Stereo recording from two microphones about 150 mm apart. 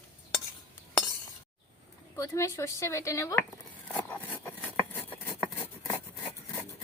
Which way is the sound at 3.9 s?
10° left (ahead or behind).